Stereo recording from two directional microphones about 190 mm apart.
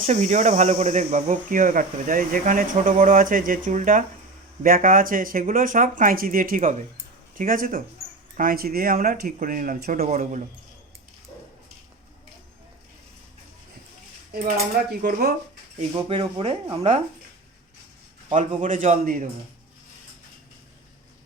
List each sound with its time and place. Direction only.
0.0 s speech: 40° right (ahead or behind)
14.3 s speech: 50° right (ahead or behind)
16.0 s speech: 30° right (ahead or behind)
18.6 s speech: 40° right (ahead or behind)